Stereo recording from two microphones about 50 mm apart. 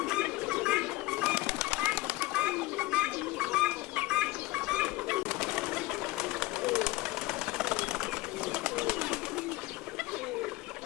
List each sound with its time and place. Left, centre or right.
0.0 s bird: centre
1.4 s bird: centre
1.9 s bird: centre